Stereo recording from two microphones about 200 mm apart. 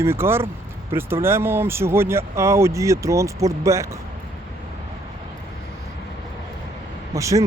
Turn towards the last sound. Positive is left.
turn(degrees=-15)  # may be behind; listen again after turning